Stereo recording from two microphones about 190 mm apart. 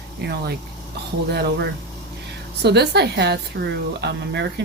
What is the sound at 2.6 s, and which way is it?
Speech, 60° right (ahead or behind).